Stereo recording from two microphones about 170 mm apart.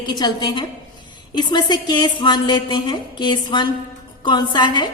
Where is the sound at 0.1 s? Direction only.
25° left (ahead or behind).